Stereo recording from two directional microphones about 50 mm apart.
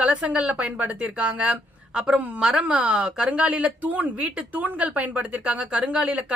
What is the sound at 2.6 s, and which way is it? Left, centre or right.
Speech, right.